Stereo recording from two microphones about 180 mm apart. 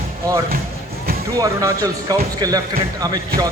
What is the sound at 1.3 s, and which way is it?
A man's voice, 20° right (ahead or behind).